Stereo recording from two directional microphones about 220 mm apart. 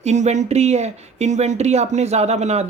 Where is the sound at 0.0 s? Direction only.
30° right (ahead or behind).